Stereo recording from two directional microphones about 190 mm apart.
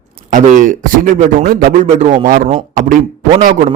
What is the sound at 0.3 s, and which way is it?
A man's voice, 45° right (ahead or behind).